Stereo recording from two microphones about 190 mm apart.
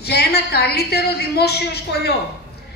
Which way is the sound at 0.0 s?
60° left (ahead or behind).